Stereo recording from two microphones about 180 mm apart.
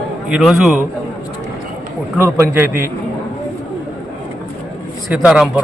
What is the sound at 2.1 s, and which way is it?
Speech, 15° right (ahead or behind).